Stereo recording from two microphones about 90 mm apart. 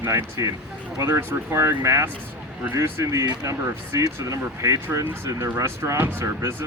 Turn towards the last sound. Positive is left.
turn(degrees=-30)  # may be behind; listen again after turning